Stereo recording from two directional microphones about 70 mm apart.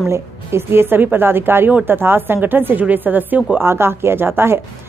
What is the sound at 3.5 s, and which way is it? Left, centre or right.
Speech, right.